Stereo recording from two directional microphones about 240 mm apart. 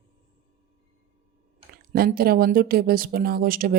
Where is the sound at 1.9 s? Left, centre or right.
Right.